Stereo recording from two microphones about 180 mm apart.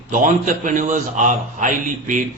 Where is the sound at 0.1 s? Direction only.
45° right (ahead or behind).